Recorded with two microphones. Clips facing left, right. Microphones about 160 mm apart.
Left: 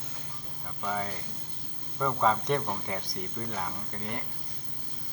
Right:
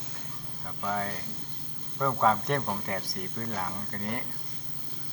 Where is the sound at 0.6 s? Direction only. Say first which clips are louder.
Right 1 dB; centre (ahead or behind).